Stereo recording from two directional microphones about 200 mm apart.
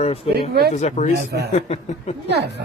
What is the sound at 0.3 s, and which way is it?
Speech, 50° right (ahead or behind).